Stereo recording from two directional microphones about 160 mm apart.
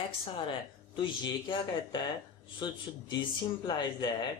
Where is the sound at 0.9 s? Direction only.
30° left (ahead or behind).